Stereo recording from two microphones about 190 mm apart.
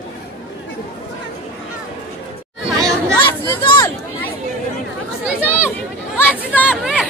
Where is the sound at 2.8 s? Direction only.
10° left (ahead or behind).